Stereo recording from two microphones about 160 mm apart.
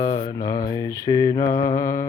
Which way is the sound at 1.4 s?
55° left (ahead or behind).